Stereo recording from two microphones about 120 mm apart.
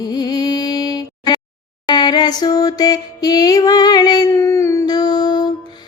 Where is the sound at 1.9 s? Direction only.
35° left (ahead or behind).